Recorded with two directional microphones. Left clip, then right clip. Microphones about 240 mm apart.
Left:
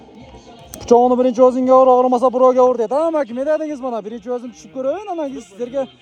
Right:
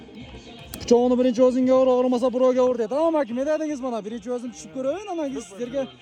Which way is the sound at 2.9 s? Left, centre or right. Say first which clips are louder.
Left 4 dB; centre.